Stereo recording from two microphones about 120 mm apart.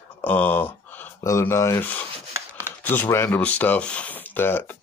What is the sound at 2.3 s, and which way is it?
Chopping, 20° right (ahead or behind).